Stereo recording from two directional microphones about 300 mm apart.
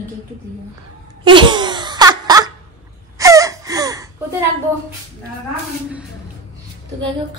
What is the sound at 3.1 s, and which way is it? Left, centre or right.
Wail, centre.